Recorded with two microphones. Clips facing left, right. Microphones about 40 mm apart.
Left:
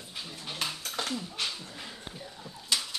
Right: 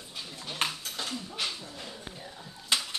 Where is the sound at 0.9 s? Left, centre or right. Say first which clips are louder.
Left 3 dB; left.